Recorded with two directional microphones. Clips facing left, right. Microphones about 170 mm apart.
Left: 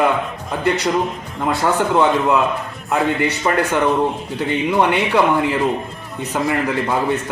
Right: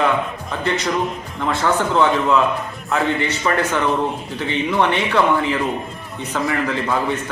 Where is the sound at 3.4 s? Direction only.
20° left (ahead or behind).